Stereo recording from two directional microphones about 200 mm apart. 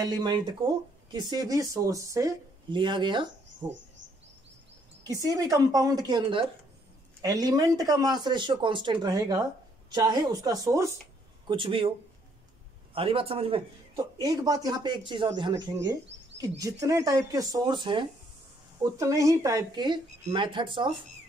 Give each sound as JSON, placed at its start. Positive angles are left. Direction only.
{"t": 0.0, "sound": "speech", "side_deg": -20}
{"t": 5.0, "sound": "speech", "side_deg": -15}
{"t": 12.9, "sound": "a man's voice", "side_deg": -25}